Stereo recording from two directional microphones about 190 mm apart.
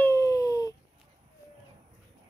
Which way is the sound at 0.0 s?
15° left (ahead or behind).